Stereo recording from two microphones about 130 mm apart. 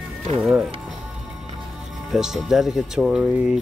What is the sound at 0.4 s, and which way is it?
Speech, 5° right (ahead or behind).